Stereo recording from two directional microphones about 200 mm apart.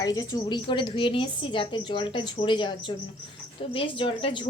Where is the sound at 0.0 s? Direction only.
20° left (ahead or behind).